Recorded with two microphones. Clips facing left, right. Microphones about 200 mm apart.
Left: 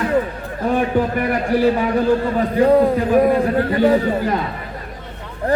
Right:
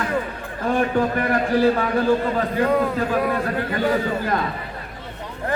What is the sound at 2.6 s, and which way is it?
Speech, 35° left (ahead or behind).